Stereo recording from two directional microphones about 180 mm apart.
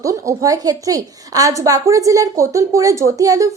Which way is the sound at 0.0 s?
20° right (ahead or behind).